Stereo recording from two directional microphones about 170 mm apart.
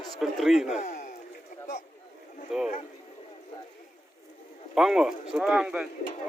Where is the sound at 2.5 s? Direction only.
Centre (ahead or behind).